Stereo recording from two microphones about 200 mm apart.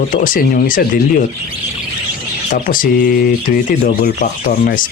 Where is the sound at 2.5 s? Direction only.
45° left (ahead or behind).